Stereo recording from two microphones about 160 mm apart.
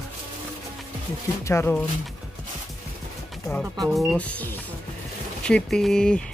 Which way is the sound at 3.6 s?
Centre (ahead or behind).